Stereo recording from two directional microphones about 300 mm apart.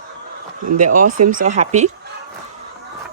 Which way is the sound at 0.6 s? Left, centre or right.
Right.